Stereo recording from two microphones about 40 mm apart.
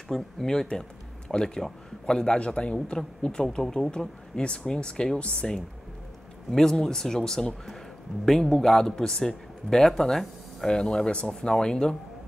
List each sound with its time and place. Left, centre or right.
0.1 s a man's voice: centre
3.3 s speech: centre
3.9 s a man's voice: left